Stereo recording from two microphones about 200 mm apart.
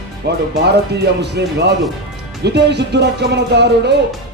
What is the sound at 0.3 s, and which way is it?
Speech, 55° right (ahead or behind).